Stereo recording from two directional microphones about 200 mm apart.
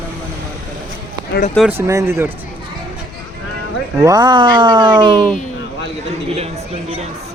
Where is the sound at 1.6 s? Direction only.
5° left (ahead or behind).